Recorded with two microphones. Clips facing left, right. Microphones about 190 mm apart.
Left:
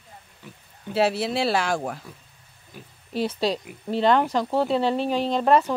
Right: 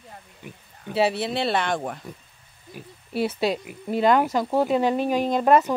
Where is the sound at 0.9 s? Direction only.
Centre (ahead or behind).